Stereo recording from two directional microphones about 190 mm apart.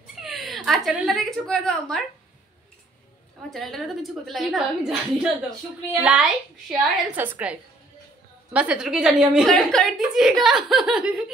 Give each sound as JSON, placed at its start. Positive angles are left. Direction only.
{"t": 0.2, "sound": "a woman's voice", "side_deg": 0}
{"t": 3.4, "sound": "a woman's voice", "side_deg": 0}
{"t": 8.5, "sound": "a woman's voice", "side_deg": -5}